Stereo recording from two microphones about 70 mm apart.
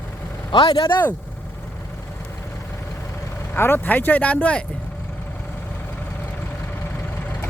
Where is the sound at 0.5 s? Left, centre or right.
Left.